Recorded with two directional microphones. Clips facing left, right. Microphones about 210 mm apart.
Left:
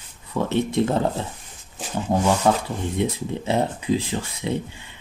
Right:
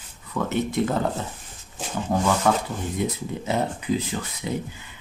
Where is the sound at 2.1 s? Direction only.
25° left (ahead or behind).